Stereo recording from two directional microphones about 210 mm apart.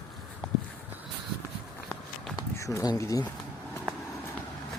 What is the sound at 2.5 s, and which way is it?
Speech, 15° left (ahead or behind).